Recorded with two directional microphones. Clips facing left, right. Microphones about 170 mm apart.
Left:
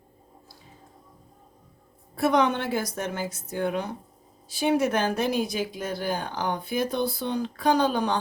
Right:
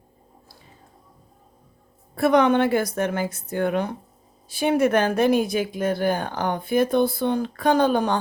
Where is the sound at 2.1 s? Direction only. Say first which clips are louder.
Right 5 dB; 60° right (ahead or behind).